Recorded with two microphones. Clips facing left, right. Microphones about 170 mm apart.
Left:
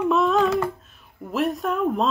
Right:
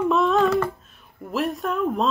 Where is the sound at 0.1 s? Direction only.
Centre (ahead or behind).